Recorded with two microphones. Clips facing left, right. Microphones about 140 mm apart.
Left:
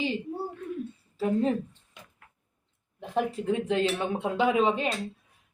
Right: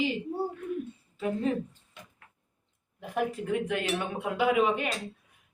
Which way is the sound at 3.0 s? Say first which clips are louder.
Left 2 dB; 25° left (ahead or behind).